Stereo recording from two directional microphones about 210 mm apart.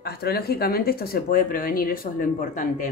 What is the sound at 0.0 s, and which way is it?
Speech, 50° left (ahead or behind).